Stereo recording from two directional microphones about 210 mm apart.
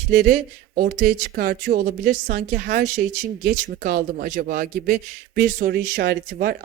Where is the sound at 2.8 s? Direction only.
90° right.